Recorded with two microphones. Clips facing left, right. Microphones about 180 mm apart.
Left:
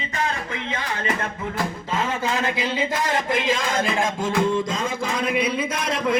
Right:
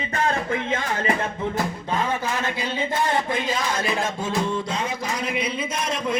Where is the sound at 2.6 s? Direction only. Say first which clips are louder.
Left 1 dB; 90° left.